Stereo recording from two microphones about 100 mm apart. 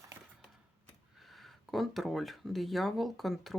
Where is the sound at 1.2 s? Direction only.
Centre (ahead or behind).